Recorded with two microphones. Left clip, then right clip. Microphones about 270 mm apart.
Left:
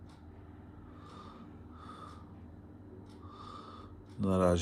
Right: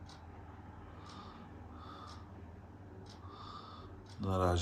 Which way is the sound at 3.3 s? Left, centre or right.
Left.